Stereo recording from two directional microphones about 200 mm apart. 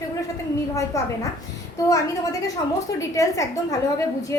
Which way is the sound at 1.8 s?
15° left (ahead or behind).